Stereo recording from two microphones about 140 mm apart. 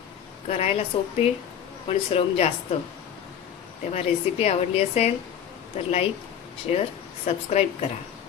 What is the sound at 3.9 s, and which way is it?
A woman's voice, 50° left (ahead or behind).